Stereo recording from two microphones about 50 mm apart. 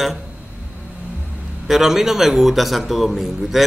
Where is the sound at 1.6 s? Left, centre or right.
Centre.